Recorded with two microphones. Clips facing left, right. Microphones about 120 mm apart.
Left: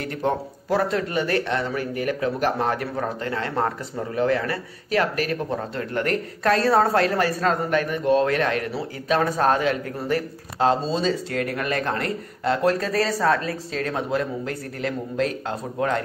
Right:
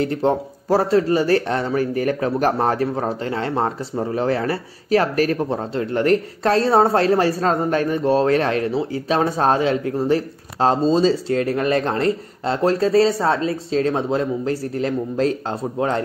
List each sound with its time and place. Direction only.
0.0 s speech: 30° right (ahead or behind)